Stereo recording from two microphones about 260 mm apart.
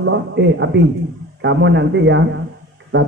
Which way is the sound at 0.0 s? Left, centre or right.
Right.